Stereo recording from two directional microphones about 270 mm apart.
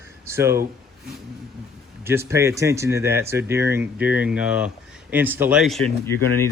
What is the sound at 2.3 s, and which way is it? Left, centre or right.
A man's voice, centre.